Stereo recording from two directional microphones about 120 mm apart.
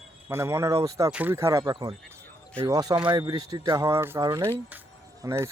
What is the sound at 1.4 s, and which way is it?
Speech, 25° right (ahead or behind).